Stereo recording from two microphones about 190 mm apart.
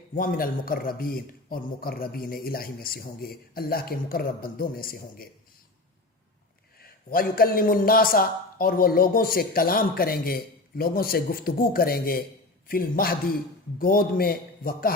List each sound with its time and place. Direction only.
0.1 s a man's voice: 50° left (ahead or behind)
7.1 s a man's voice: 50° left (ahead or behind)